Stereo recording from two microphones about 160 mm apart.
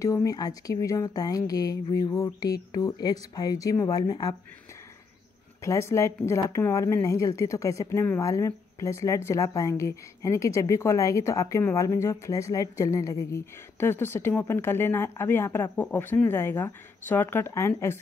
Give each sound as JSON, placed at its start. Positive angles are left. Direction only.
{"t": 0.0, "sound": "a woman's voice", "side_deg": 20}
{"t": 5.6, "sound": "a woman's voice", "side_deg": 20}